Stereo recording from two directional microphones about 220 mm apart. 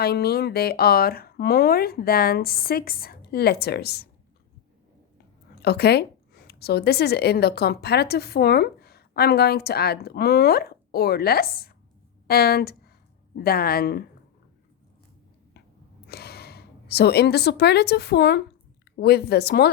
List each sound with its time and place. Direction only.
0.0 s a woman's voice: 45° left (ahead or behind)
5.6 s a woman's voice: 50° left (ahead or behind)
16.0 s a woman's voice: 45° left (ahead or behind)